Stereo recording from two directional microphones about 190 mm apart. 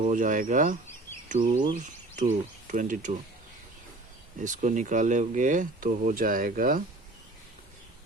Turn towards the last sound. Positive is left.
turn(degrees=-45)  # may be behind; listen again after turning